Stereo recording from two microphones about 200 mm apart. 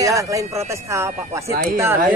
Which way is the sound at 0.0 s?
15° right (ahead or behind).